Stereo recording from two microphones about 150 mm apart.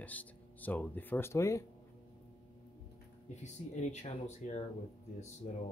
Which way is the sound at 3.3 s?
50° left (ahead or behind).